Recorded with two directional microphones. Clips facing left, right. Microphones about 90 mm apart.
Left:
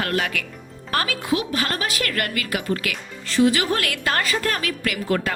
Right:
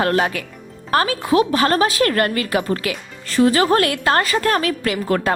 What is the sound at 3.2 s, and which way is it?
A woman's voice, 40° right (ahead or behind).